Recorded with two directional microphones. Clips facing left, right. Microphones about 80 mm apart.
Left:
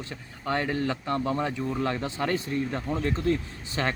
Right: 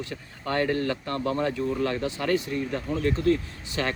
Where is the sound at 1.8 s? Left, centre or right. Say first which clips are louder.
Right 1 dB; left.